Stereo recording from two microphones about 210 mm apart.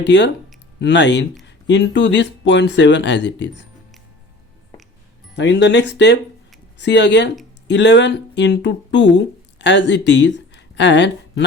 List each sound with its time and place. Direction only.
0.0 s speech: 55° left (ahead or behind)
5.4 s speech: 55° left (ahead or behind)